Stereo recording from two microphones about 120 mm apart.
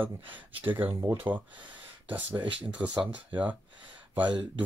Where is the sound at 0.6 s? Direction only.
15° right (ahead or behind).